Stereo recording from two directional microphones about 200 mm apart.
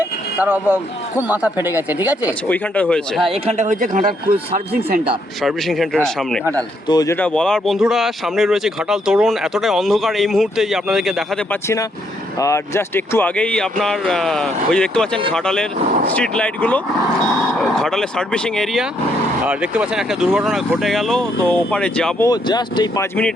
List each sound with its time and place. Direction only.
0.0 s vehicle: 10° right (ahead or behind)
1.3 s speech: 5° right (ahead or behind)
2.5 s speech: 10° left (ahead or behind)
3.2 s speech: 30° right (ahead or behind)
5.4 s speech: centre (ahead or behind)
6.4 s speech: 15° right (ahead or behind)
6.8 s speech: 20° left (ahead or behind); by 11.1 s centre (ahead or behind)
12.4 s speech: 15° left (ahead or behind)
22.3 s speech: 20° left (ahead or behind)